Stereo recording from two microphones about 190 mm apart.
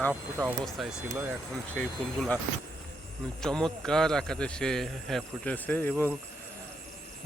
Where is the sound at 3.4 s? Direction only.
5° left (ahead or behind).